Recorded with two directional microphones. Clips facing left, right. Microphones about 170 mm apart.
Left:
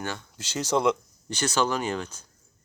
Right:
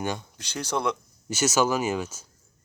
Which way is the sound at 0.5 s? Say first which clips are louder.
Left 4 dB; 10° left (ahead or behind).